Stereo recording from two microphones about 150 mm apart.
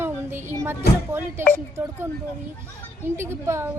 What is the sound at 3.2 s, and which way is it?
Speech, 15° right (ahead or behind).